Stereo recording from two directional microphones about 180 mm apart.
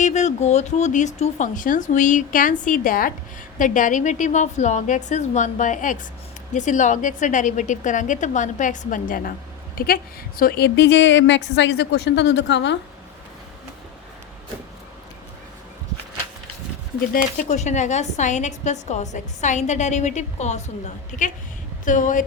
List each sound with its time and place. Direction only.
0.0 s a woman's voice: 40° left (ahead or behind); by 12.7 s 75° left (ahead or behind)
17.1 s a woman's voice: 45° left (ahead or behind)